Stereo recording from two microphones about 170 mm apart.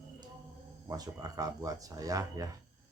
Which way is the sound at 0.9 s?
20° right (ahead or behind).